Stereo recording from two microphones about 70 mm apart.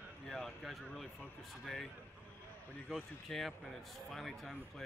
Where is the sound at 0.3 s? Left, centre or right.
Centre.